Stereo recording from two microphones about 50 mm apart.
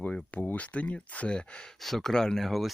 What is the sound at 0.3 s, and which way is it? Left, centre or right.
Speech, left.